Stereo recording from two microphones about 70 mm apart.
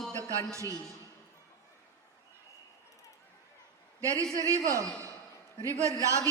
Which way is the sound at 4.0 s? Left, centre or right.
Right.